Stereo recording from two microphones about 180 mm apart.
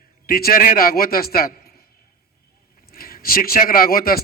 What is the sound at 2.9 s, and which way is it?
A man's voice, 55° left (ahead or behind).